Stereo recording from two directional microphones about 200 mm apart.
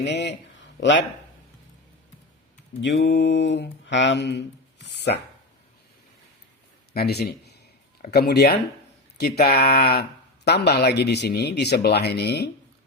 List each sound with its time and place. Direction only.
0.0 s a man's voice: 60° left (ahead or behind)
2.8 s speech: 65° left (ahead or behind)
6.9 s a man's voice: 55° left (ahead or behind)